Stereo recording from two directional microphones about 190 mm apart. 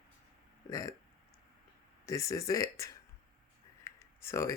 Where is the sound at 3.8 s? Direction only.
15° left (ahead or behind).